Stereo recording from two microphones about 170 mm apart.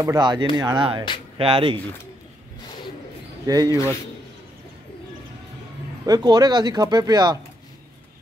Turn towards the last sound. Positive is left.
turn(degrees=-25)  # may be behind; listen again after turning